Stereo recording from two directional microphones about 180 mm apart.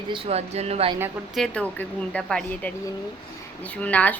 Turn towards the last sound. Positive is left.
turn(degrees=10)  # may be behind; listen again after turning